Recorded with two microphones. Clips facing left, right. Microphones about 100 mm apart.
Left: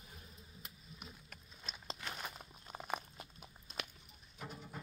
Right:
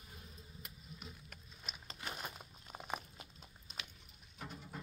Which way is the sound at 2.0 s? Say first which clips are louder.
Right 3 dB; 10° right (ahead or behind).